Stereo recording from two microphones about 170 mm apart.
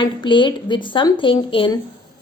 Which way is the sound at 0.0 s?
30° left (ahead or behind).